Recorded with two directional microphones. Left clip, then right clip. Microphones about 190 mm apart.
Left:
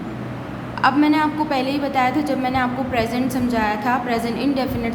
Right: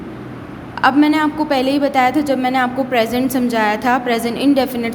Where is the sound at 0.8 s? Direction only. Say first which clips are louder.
Right 3 dB; 30° right (ahead or behind).